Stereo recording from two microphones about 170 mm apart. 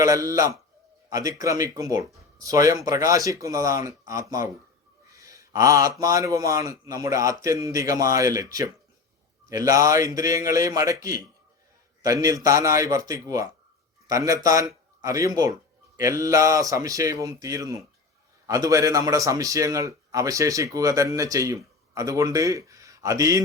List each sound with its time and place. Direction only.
0.0 s a man's voice: 20° right (ahead or behind)